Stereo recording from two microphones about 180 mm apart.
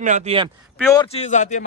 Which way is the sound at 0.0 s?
40° right (ahead or behind).